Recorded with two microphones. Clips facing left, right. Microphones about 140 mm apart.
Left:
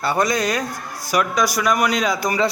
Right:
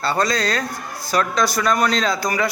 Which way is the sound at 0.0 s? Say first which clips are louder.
Left 1 dB; 15° left (ahead or behind).